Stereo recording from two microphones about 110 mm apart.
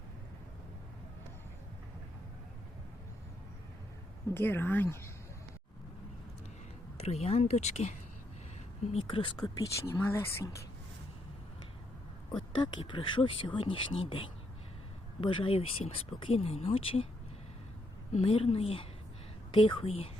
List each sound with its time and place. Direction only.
4.4 s speech: 20° left (ahead or behind)
7.0 s speech: 75° left (ahead or behind); by 7.9 s 90° left
8.9 s speech: 55° left (ahead or behind)
10.0 s speech: 25° left (ahead or behind)
12.5 s speech: 45° left (ahead or behind)
18.1 s speech: 60° left (ahead or behind)